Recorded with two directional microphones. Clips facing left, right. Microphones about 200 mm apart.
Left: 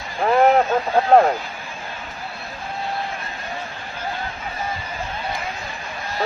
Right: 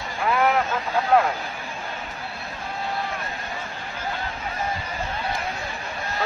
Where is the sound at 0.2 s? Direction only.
40° left (ahead or behind).